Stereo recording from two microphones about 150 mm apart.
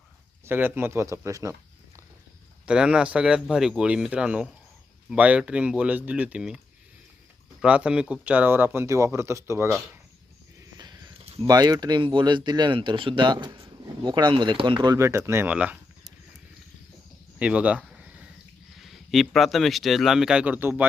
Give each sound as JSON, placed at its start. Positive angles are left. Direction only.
{"t": 0.4, "sound": "speech", "side_deg": -15}
{"t": 2.6, "sound": "speech", "side_deg": -5}
{"t": 7.6, "sound": "speech", "side_deg": -10}
{"t": 10.8, "sound": "a sound", "side_deg": -25}
{"t": 11.4, "sound": "speech", "side_deg": -25}
{"t": 14.9, "sound": "speech", "side_deg": -20}
{"t": 17.4, "sound": "a sound", "side_deg": -10}
{"t": 18.8, "sound": "speech", "side_deg": 0}